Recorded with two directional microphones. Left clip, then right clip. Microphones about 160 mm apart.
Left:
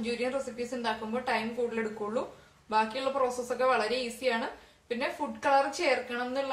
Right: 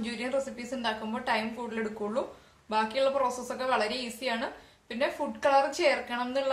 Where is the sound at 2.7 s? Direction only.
55° right (ahead or behind).